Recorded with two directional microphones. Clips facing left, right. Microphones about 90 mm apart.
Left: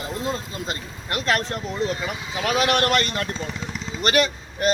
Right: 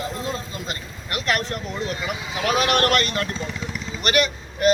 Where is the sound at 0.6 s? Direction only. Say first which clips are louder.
Left 2 dB; 30° left (ahead or behind).